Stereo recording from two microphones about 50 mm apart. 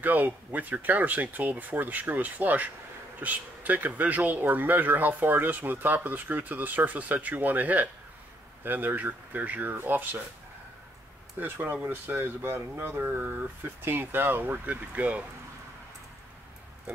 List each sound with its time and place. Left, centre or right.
0.0 s speech: right
11.3 s speech: right